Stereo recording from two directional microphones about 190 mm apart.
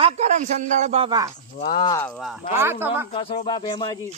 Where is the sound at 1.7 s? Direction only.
25° left (ahead or behind).